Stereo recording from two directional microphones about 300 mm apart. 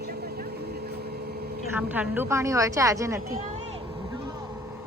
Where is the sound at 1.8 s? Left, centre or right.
Centre.